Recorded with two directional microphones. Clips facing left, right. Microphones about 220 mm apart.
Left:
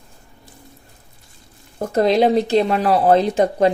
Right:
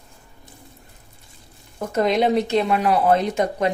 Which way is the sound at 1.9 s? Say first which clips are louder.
Left 4 dB; 35° left (ahead or behind).